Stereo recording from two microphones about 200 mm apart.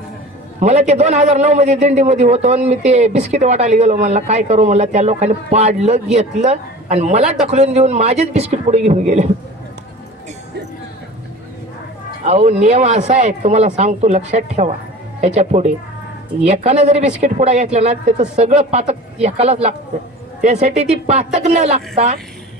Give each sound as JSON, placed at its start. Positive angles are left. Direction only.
{"t": 0.6, "sound": "a man's voice", "side_deg": -35}
{"t": 12.3, "sound": "a man's voice", "side_deg": -35}